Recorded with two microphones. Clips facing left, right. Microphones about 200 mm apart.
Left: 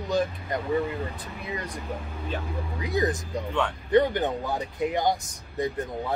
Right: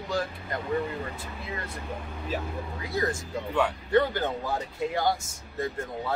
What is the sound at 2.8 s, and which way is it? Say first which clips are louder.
Speech: left 4 dB; 20° left (ahead or behind).